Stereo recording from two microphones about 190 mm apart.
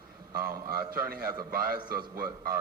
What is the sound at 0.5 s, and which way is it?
A man's voice, 50° right (ahead or behind).